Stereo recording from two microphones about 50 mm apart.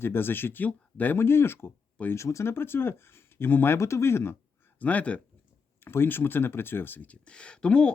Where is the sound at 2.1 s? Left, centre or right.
Left.